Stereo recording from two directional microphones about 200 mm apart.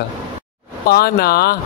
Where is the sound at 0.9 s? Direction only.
50° left (ahead or behind).